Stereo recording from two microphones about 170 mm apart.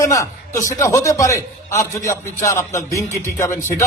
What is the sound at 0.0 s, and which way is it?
A man's voice, 20° left (ahead or behind).